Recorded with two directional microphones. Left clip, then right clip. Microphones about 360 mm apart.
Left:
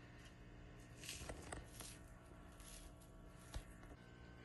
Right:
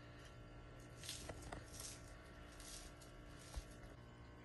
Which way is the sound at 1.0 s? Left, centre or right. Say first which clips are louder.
Even; right.